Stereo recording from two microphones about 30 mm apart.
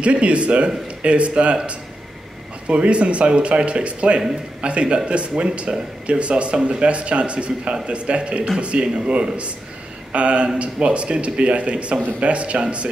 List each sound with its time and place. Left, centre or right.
0.0 s a man's voice: right
2.7 s speech: right
10.1 s a man's voice: right